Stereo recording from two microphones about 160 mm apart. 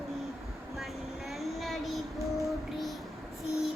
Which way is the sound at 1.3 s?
Centre (ahead or behind).